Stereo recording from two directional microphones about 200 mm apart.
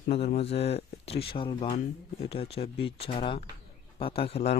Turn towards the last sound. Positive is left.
turn(degrees=30)  # may be behind; listen again after turning